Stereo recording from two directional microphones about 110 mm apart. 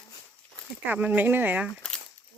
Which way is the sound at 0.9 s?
15° right (ahead or behind).